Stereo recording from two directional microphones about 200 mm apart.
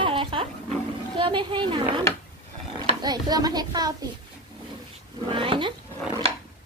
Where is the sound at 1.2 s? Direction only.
25° right (ahead or behind).